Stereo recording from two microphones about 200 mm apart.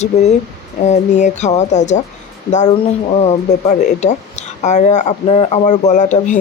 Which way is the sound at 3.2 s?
35° left (ahead or behind).